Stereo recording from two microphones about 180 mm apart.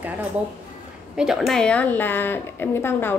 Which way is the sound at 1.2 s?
Centre (ahead or behind).